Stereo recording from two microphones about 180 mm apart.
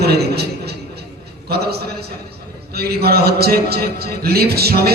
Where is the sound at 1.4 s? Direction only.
60° right (ahead or behind).